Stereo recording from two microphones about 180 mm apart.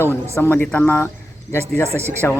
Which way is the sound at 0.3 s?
10° left (ahead or behind).